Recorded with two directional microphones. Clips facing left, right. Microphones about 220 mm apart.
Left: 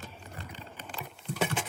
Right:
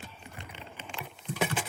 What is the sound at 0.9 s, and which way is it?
Keys jangling, 5° right (ahead or behind).